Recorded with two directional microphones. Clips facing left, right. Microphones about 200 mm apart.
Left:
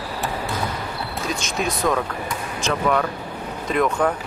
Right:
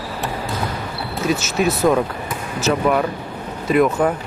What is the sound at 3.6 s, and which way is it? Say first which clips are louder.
Speech: right 5 dB; 5° right (ahead or behind).